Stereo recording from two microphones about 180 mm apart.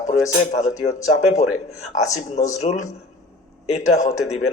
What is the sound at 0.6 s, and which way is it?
Speech, 40° left (ahead or behind).